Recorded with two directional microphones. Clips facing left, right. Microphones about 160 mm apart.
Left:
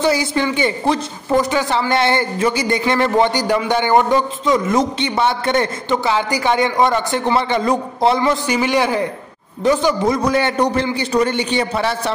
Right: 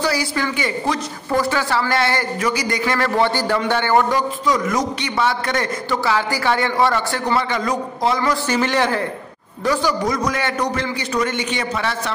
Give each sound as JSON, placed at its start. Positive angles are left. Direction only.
{"t": 0.0, "sound": "speech", "side_deg": 20}
{"t": 8.5, "sound": "a man's voice", "side_deg": 10}
{"t": 9.7, "sound": "speech", "side_deg": 25}